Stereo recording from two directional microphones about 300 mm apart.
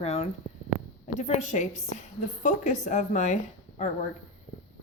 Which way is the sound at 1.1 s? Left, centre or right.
Left.